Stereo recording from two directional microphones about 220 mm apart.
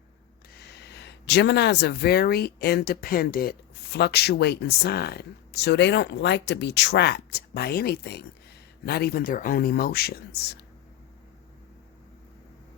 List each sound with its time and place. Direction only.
0.5 s speech: 50° left (ahead or behind)